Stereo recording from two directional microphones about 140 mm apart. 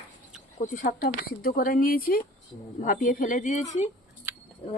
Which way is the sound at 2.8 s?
70° left (ahead or behind).